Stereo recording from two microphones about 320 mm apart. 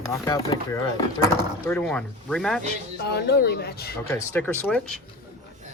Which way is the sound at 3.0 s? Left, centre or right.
Left.